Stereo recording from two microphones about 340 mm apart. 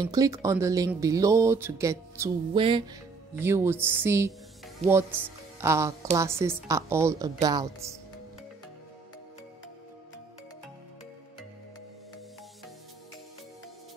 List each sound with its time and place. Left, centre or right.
0.0 s speech: centre
4.8 s speech: centre